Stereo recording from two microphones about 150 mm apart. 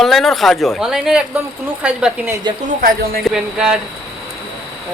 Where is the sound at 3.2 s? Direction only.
5° right (ahead or behind).